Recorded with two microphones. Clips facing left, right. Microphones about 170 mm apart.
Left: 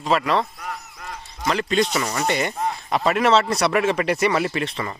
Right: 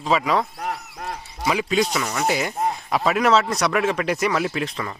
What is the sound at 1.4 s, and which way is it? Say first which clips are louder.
Speech: even; 5° right (ahead or behind).